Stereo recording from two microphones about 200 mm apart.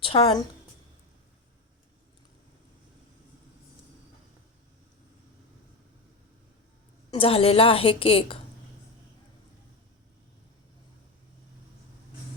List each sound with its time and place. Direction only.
0.0 s a woman's voice: 25° left (ahead or behind)
7.1 s a woman's voice: 30° left (ahead or behind)